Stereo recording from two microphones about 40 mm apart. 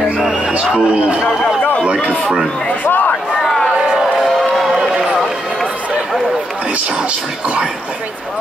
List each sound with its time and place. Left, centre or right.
0.5 s a man's voice: right
1.6 s run: left
2.9 s a sound: left
4.6 s run: centre